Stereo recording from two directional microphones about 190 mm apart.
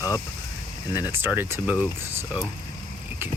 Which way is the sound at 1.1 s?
10° right (ahead or behind).